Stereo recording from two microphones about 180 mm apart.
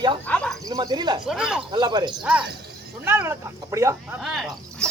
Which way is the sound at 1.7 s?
25° right (ahead or behind).